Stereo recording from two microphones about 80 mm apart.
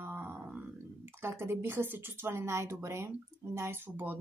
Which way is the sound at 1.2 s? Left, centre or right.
Right.